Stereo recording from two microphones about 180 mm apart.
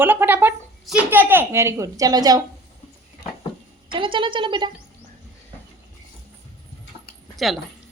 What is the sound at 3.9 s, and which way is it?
Speech, 30° right (ahead or behind).